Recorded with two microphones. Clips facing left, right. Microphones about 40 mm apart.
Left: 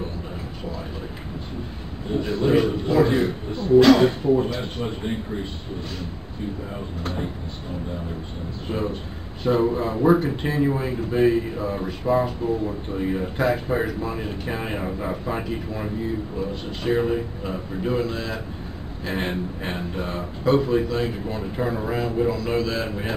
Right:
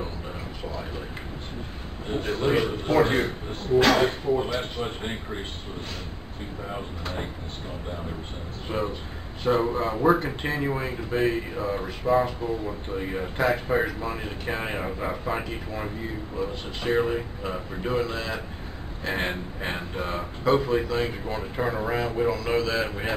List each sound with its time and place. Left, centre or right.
2.1 s a man's voice: right
2.4 s speech: centre
2.9 s a man's voice: right
8.6 s speech: centre